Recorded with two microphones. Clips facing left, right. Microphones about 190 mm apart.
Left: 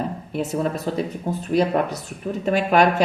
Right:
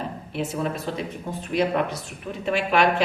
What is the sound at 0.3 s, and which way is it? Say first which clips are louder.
Speech: left 3 dB; 40° left (ahead or behind).